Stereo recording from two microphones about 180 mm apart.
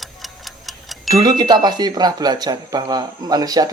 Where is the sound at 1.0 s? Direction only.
20° right (ahead or behind).